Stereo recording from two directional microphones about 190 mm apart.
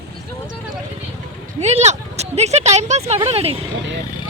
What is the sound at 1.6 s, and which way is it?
Speech, 35° right (ahead or behind).